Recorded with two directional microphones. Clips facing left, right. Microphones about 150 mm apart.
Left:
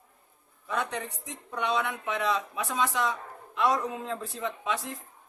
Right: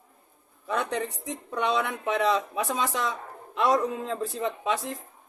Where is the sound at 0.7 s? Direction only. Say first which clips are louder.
Right 4 dB; 35° right (ahead or behind).